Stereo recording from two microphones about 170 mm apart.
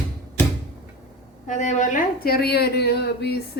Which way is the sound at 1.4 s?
45° left (ahead or behind).